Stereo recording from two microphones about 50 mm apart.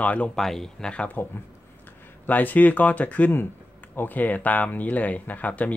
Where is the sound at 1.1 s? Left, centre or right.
Left.